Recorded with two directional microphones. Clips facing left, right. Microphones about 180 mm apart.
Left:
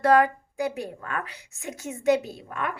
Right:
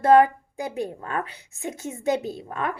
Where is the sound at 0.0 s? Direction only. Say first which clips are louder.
Right 3 dB; 25° right (ahead or behind).